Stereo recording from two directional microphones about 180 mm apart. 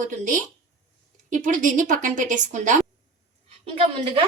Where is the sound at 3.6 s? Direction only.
35° right (ahead or behind).